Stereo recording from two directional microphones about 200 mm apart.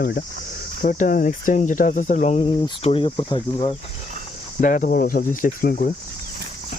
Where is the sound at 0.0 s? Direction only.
45° left (ahead or behind).